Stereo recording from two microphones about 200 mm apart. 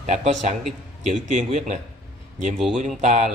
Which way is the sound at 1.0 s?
40° right (ahead or behind).